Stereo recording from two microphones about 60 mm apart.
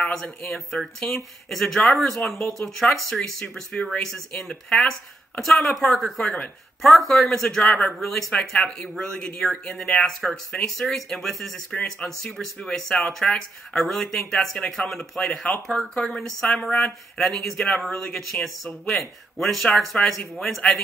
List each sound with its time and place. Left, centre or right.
0.0 s speech: centre
6.2 s speech: centre
6.8 s speech: centre
11.7 s speech: centre